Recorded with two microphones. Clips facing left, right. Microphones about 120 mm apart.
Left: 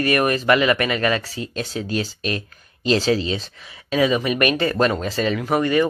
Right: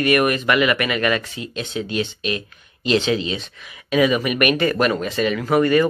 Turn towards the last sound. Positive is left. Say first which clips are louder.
# right 3 dB
turn(degrees=20)  # may be behind; listen again after turning